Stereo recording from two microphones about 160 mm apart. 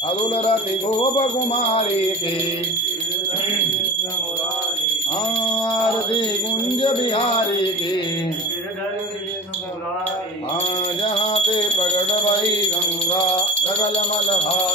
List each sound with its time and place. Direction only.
0.3 s music: 40° left (ahead or behind)
5.4 s music: 30° left (ahead or behind)
11.0 s music: 35° left (ahead or behind)